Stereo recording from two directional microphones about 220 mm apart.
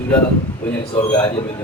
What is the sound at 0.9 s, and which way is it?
Speech, 20° left (ahead or behind).